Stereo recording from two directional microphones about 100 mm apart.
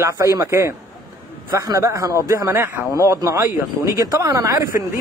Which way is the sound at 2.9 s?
35° right (ahead or behind).